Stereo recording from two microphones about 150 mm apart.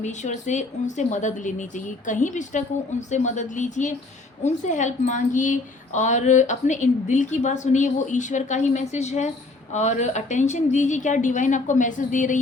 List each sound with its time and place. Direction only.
0.0 s a woman's voice: 55° left (ahead or behind)